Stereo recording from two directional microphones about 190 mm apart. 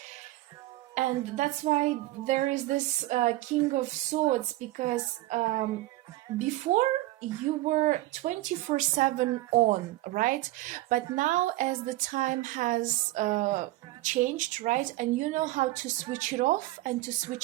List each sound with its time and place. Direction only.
0.9 s a woman's voice: 40° right (ahead or behind)